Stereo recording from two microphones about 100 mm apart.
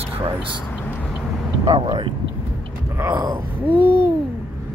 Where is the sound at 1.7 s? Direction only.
65° right (ahead or behind).